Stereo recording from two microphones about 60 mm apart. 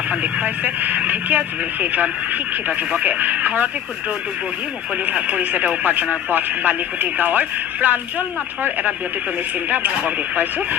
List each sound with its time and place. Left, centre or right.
0.1 s speech: right
5.1 s speech: right
9.6 s speech: right